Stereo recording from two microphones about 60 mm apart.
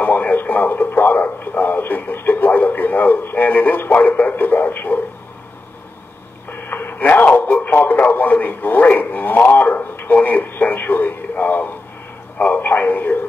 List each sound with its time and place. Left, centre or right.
0.0 s radio: left
6.5 s radio: left
12.4 s a sound: left